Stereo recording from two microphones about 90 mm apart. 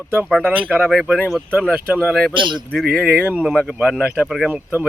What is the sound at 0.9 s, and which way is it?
Speech, 5° right (ahead or behind).